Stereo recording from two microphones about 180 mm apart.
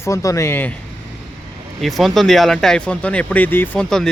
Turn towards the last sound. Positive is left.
turn(degrees=5)  # may be behind; listen again after turning